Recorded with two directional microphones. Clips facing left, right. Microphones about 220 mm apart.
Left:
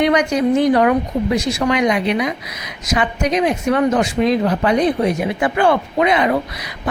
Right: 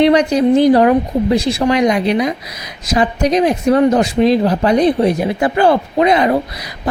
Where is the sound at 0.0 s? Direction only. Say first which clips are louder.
Right 4 dB; 30° right (ahead or behind).